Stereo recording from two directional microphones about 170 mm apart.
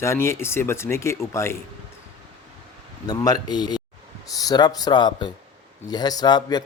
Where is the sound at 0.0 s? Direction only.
15° left (ahead or behind).